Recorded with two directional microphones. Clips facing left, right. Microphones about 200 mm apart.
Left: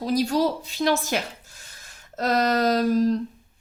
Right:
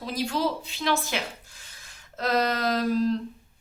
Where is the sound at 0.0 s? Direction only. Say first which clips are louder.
Left 6 dB; 40° left (ahead or behind).